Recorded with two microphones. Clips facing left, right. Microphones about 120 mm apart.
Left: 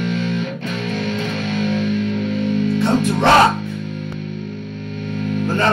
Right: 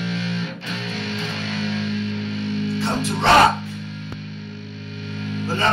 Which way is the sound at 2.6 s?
50° left (ahead or behind).